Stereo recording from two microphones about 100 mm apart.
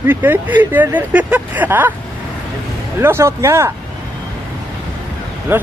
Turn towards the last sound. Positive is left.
turn(degrees=-20)  # may be behind; listen again after turning